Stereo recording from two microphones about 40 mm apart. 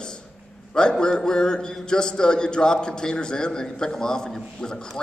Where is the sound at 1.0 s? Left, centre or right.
Centre.